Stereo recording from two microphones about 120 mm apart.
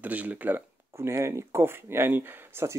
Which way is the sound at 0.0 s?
15° right (ahead or behind).